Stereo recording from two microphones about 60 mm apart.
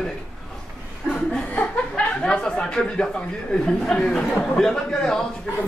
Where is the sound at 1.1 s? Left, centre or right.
Centre.